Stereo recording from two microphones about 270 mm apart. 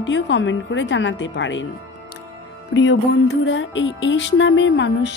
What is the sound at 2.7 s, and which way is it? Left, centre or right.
Speech, left.